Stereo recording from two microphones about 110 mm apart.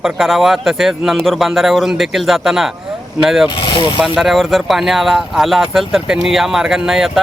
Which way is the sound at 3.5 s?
50° left (ahead or behind).